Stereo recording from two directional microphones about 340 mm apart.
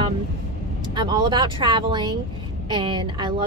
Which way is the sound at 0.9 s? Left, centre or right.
Centre.